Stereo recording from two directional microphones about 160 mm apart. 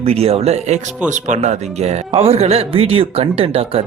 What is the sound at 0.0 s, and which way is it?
Speech, 40° right (ahead or behind).